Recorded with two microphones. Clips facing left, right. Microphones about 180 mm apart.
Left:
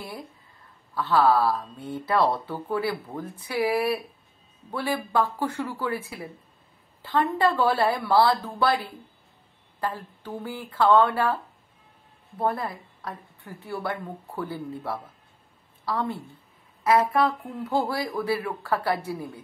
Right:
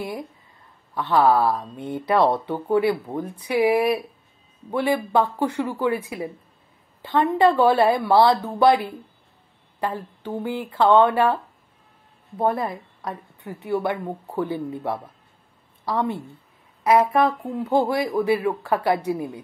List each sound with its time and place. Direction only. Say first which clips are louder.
0.9 s speech: right 3 dB; 20° right (ahead or behind)
12.4 s a woman's voice: right 4 dB; 20° right (ahead or behind)